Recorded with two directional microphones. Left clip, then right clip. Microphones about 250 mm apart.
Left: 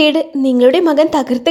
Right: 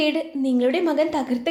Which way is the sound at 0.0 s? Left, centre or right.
Left.